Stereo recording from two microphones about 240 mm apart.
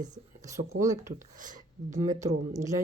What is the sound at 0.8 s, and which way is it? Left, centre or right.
Speech, centre.